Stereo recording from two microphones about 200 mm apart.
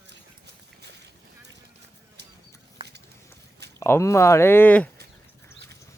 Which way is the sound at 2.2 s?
60° right (ahead or behind).